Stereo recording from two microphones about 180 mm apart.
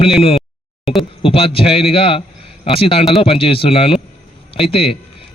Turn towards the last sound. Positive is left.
turn(degrees=30)  # may be behind; listen again after turning